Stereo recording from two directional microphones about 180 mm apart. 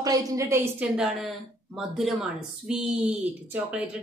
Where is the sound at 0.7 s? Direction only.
5° right (ahead or behind).